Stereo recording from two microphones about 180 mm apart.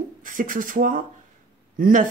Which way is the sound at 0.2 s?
50° right (ahead or behind).